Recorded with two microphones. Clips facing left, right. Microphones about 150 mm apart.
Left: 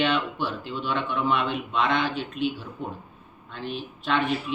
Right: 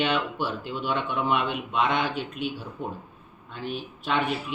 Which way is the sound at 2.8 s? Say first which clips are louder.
Even; 50° right (ahead or behind).